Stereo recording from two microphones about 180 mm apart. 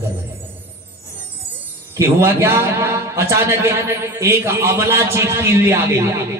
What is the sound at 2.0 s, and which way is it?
A man's voice, 15° right (ahead or behind).